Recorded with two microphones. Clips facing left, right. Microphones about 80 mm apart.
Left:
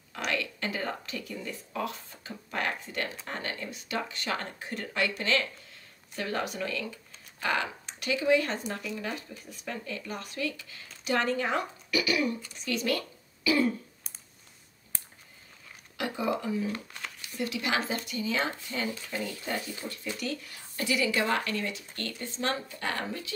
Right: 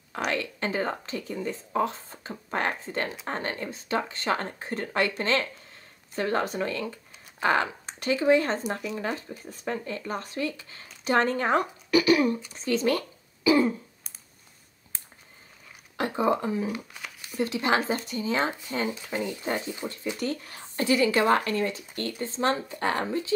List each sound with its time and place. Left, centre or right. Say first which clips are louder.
0.3 s speech: right 2 dB; right
16.0 s speech: right 5 dB; right
16.6 s speech: right 2 dB; centre
17.4 s speech: right 5 dB; right